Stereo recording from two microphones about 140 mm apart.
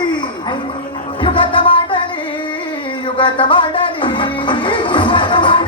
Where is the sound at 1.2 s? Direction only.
40° left (ahead or behind).